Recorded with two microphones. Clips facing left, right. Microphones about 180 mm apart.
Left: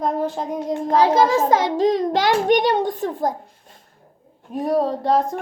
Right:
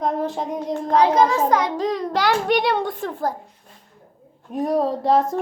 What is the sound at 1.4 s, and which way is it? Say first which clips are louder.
Speech: left 1 dB; 25° left (ahead or behind).